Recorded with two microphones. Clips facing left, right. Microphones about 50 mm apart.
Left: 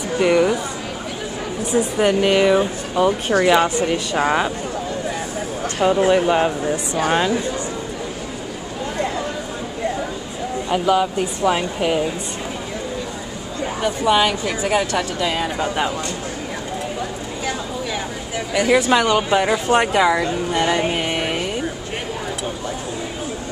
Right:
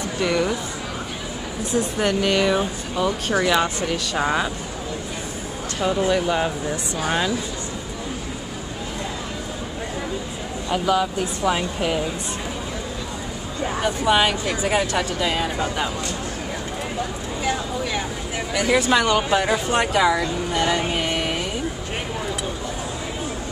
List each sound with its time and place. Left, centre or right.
0.2 s speech: left
1.7 s speech: centre
6.0 s speech: left
10.7 s speech: centre
13.8 s speech: centre
18.5 s speech: centre